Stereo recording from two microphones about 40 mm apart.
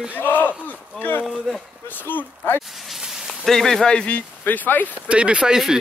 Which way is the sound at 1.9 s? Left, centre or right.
Left.